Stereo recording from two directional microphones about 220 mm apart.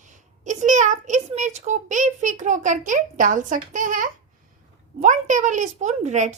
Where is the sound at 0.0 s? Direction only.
35° right (ahead or behind).